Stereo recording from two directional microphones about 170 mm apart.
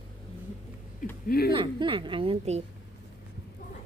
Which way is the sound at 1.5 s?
30° right (ahead or behind).